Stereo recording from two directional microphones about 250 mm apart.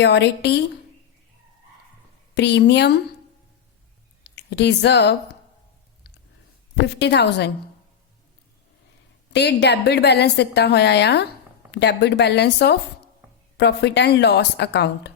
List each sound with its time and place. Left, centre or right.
0.0 s a woman's voice: left
2.3 s a woman's voice: left
4.2 s speech: left
6.8 s a woman's voice: left
9.3 s a woman's voice: left